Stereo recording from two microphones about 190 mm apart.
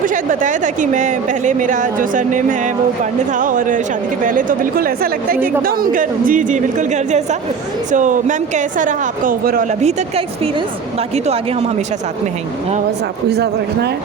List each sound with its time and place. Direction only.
0.0 s a woman's voice: 45° right (ahead or behind)
9.8 s a woman's voice: 30° right (ahead or behind)
13.3 s speech: 60° right (ahead or behind)